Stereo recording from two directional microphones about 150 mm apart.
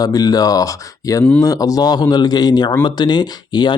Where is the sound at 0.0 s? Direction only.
25° left (ahead or behind).